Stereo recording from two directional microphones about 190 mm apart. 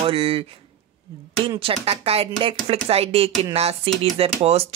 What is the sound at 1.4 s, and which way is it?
Speech, 30° right (ahead or behind).